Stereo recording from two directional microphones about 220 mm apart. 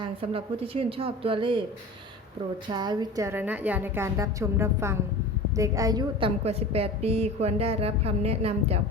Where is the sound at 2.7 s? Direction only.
20° right (ahead or behind).